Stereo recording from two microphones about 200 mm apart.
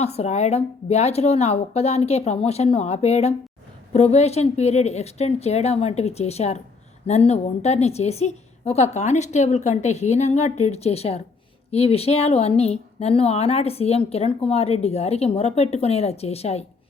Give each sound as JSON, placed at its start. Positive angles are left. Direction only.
{"t": 0.0, "sound": "speech", "side_deg": 35}